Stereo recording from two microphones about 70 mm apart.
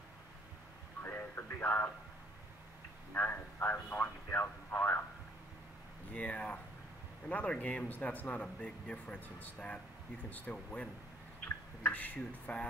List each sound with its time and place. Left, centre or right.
1.0 s a sound: left
3.1 s speech: left
6.1 s speech: centre